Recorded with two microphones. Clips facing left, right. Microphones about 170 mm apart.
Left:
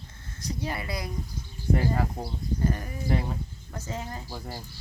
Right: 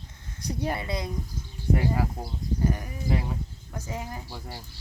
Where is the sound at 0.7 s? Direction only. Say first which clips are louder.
Right 4 dB; 25° right (ahead or behind).